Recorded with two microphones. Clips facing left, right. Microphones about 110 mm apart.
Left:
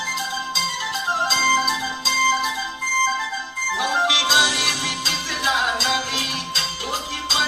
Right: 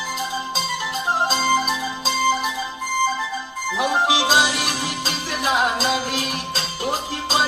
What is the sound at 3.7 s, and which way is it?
Music, 45° right (ahead or behind).